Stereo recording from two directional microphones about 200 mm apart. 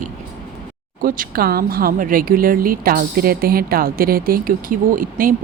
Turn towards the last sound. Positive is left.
turn(degrees=-45)  # may be behind; listen again after turning